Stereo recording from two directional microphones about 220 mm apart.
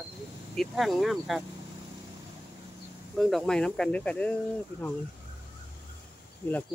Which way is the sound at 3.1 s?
Centre (ahead or behind).